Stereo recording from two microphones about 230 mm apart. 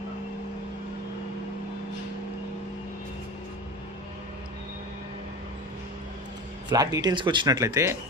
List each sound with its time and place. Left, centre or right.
6.7 s speech: centre